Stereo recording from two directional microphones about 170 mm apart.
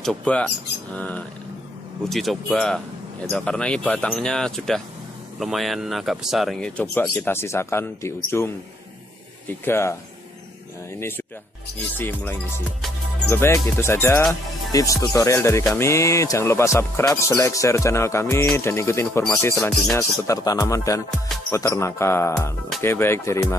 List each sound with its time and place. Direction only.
0.0 s speech: 5° left (ahead or behind)
9.7 s speech: 15° left (ahead or behind)
11.0 s speech: 15° left (ahead or behind)